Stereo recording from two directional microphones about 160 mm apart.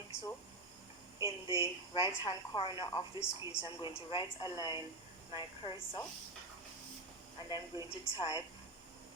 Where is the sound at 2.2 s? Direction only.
30° left (ahead or behind).